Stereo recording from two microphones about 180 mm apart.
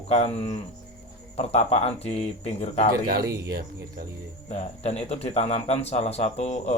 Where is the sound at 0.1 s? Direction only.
35° left (ahead or behind).